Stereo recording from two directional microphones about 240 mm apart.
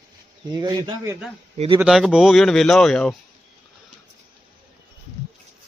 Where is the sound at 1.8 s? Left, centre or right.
Centre.